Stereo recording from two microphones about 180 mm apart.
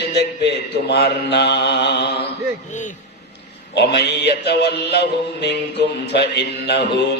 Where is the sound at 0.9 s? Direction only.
65° left (ahead or behind).